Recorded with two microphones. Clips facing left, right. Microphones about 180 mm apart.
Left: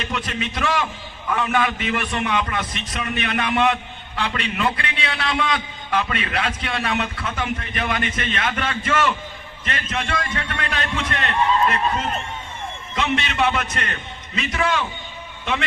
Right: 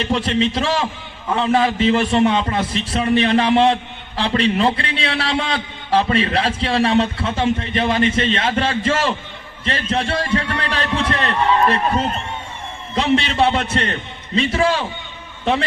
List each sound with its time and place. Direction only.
0.0 s a man's voice: 30° right (ahead or behind)